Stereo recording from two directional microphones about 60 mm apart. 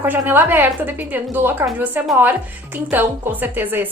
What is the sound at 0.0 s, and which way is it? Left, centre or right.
A woman's voice, right.